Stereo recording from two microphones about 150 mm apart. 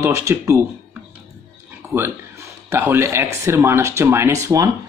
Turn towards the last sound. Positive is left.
turn(degrees=-20)  # may be behind; listen again after turning